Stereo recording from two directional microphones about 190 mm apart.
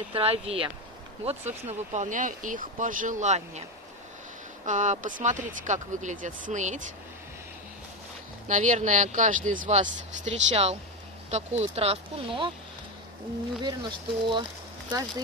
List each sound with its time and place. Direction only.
0.1 s speech: 30° right (ahead or behind)
4.6 s speech: 40° right (ahead or behind)
8.5 s speech: 40° right (ahead or behind)
13.7 s speech: 25° right (ahead or behind)